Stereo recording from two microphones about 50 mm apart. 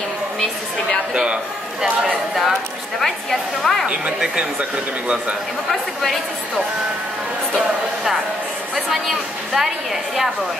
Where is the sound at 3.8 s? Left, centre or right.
Right.